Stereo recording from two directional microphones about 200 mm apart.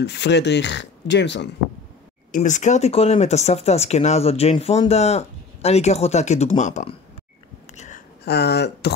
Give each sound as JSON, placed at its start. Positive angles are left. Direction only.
{"t": 0.0, "sound": "speech", "side_deg": 55}
{"t": 2.3, "sound": "speech", "side_deg": 35}
{"t": 7.7, "sound": "a sound", "side_deg": 35}
{"t": 8.3, "sound": "speech", "side_deg": 55}